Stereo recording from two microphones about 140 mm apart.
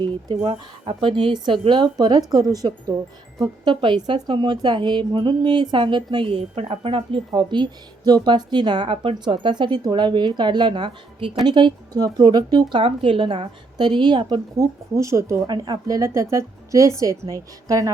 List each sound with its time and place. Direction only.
0.0 s a woman's voice: 35° right (ahead or behind)